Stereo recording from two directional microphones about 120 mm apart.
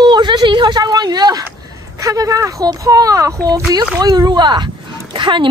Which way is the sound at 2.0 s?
30° right (ahead or behind).